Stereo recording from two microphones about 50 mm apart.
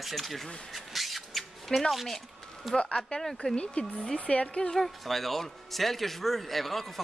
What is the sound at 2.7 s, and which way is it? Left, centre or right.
Speech, centre.